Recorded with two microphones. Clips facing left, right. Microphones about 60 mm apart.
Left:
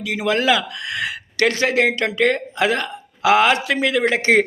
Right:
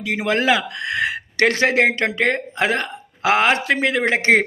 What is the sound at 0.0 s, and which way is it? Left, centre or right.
A man's voice, right.